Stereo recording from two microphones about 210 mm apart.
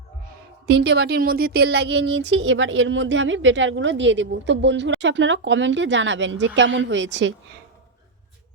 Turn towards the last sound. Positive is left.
turn(degrees=-60)  # may be behind; listen again after turning